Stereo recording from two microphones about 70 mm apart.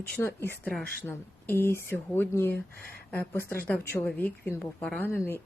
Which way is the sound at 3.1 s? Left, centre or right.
Left.